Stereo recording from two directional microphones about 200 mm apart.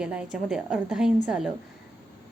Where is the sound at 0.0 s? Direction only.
5° right (ahead or behind).